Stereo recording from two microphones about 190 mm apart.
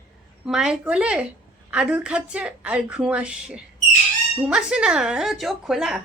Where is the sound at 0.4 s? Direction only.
5° right (ahead or behind).